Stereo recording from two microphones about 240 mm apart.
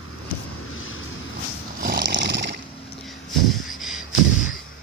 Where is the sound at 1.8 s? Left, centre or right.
Right.